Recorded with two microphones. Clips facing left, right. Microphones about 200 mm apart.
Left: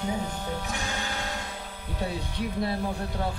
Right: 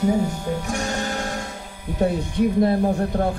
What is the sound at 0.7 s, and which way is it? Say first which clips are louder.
Music: right 8 dB; 45° right (ahead or behind).